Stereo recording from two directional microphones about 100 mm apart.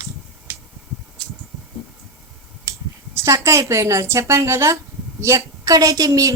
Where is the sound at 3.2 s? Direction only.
30° right (ahead or behind).